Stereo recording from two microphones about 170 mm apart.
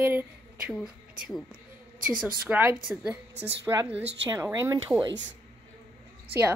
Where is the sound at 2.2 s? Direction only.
10° right (ahead or behind).